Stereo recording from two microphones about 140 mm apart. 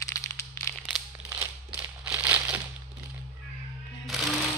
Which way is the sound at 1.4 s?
10° right (ahead or behind).